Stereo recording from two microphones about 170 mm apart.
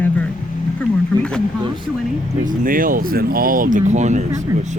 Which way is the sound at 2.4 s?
55° right (ahead or behind).